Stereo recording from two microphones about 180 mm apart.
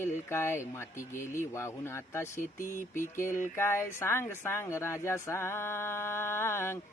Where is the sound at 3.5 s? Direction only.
15° left (ahead or behind).